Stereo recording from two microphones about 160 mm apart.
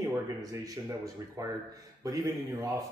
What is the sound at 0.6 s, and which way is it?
Speech, 20° right (ahead or behind).